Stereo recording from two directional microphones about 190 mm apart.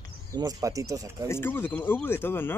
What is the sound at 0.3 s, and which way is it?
Speech, 20° right (ahead or behind).